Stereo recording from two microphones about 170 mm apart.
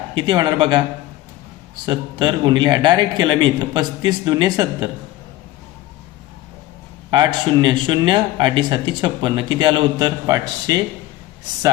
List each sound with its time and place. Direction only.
0.1 s speech: 25° right (ahead or behind)
1.9 s speech: 25° right (ahead or behind)
7.1 s speech: 25° right (ahead or behind)